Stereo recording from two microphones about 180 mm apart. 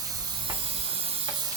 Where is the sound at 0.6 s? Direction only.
30° right (ahead or behind).